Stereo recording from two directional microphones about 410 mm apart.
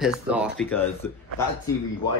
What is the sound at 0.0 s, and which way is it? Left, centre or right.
Speech, centre.